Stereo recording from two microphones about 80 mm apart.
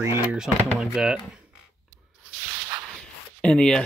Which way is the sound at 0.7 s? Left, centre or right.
Centre.